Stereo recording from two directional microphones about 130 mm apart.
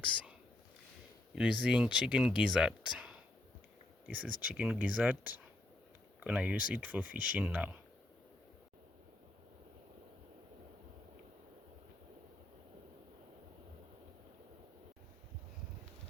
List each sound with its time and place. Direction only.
1.4 s speech: 5° right (ahead or behind)